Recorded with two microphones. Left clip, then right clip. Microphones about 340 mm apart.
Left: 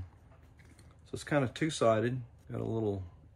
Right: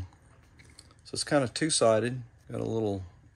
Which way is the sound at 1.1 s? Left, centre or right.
Centre.